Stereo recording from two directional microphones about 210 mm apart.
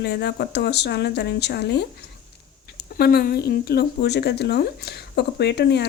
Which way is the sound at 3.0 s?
45° left (ahead or behind).